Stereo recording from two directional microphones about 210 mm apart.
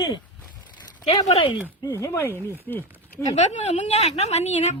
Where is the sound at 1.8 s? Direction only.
15° left (ahead or behind).